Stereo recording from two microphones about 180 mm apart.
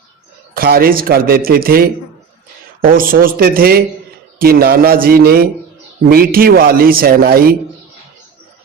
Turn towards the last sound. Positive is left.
turn(degrees=-55)  # may be behind; listen again after turning